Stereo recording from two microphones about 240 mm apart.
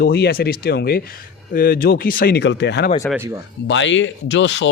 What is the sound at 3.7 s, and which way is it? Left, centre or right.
Speech, left.